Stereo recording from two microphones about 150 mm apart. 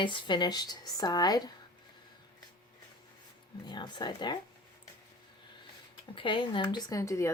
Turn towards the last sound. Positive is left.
turn(degrees=20)  # may be behind; listen again after turning